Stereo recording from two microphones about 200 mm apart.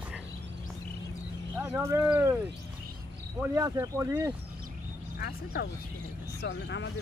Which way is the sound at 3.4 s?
15° right (ahead or behind).